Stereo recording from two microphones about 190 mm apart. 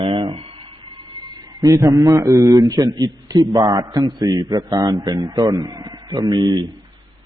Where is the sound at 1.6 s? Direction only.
15° right (ahead or behind).